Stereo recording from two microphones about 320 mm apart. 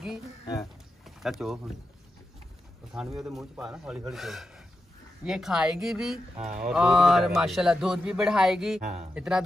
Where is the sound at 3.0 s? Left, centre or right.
Centre.